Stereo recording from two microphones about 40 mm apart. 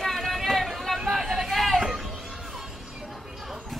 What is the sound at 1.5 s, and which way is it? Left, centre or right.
Hubbub, centre.